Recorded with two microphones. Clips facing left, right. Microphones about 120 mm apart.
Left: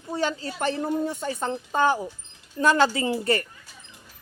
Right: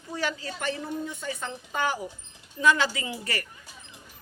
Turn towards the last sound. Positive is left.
turn(degrees=30)  # may be behind; listen again after turning